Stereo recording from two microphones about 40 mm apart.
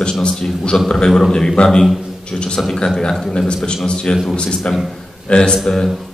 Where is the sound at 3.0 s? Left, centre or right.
Centre.